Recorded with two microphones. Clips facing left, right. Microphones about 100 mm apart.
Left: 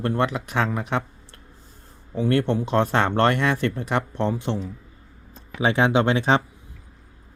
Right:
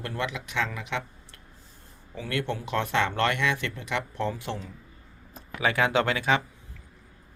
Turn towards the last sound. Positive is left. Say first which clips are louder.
# left 5 dB
turn(degrees=30)  # may be behind; listen again after turning